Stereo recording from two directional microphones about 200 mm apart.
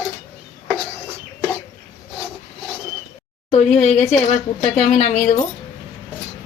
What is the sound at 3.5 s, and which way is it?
Speech, 35° left (ahead or behind).